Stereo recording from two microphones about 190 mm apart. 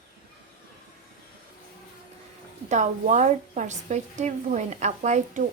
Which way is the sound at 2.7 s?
40° right (ahead or behind).